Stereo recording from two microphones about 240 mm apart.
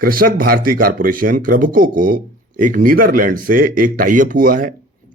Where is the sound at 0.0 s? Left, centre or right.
Right.